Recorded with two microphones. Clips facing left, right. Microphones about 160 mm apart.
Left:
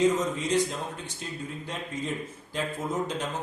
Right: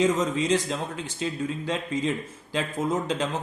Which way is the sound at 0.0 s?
90° right.